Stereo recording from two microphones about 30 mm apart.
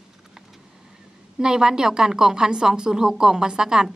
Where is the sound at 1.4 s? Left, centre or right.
Right.